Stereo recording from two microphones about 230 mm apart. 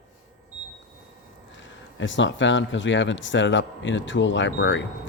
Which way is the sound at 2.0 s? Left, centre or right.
Left.